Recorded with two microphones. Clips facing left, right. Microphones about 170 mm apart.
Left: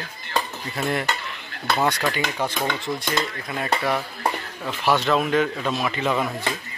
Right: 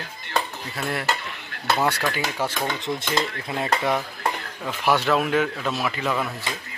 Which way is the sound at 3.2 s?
25° right (ahead or behind).